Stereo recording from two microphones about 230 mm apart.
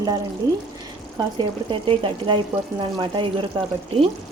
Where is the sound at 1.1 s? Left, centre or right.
Centre.